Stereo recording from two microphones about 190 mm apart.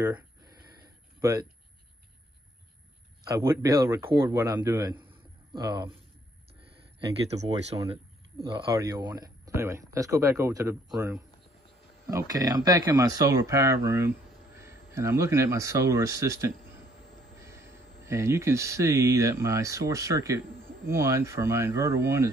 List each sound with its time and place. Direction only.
3.3 s speech: 15° right (ahead or behind)
7.3 s speech: 25° right (ahead or behind)
7.9 s a sound: 30° right (ahead or behind)
8.7 s speech: 20° right (ahead or behind)
18.0 s speech: 15° right (ahead or behind)